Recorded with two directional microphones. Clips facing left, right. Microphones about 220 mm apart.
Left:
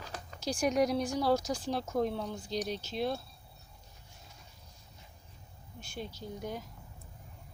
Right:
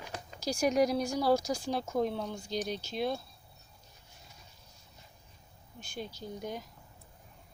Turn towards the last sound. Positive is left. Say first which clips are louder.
# even
turn(degrees=5)  # may be behind; listen again after turning